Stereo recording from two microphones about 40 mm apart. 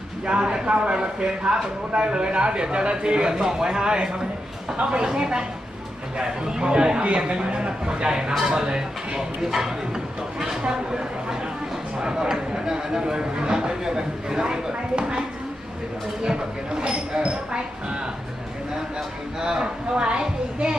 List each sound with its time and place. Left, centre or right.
0.3 s speech: right
8.3 s speech: centre; by 15.2 s right
16.2 s speech: centre